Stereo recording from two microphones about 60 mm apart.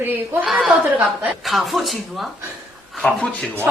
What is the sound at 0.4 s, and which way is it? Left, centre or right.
Speech, centre.